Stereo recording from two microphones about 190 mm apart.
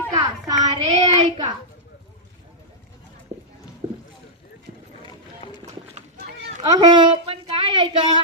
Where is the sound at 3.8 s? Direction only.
35° right (ahead or behind).